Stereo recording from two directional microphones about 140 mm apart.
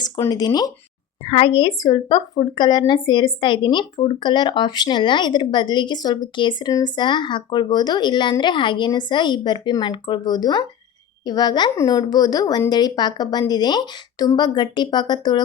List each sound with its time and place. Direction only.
0.0 s speech: 30° left (ahead or behind)
1.2 s a woman's voice: 40° left (ahead or behind)